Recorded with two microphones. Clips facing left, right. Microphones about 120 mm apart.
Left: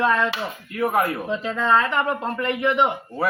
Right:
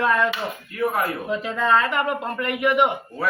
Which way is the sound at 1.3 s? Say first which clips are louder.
Even; 10° right (ahead or behind).